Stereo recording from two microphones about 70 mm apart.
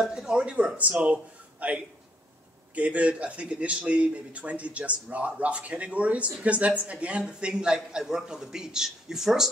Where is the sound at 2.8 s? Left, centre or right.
Centre.